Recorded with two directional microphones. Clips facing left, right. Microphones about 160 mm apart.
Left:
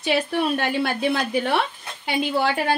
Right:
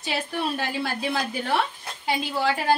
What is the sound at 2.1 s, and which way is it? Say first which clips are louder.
Speech: left 3 dB; 65° left (ahead or behind).